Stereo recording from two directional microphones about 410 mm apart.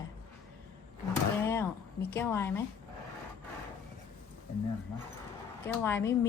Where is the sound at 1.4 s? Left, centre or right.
Centre.